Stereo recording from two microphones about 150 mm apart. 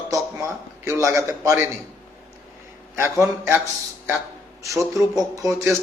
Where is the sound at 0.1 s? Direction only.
20° right (ahead or behind).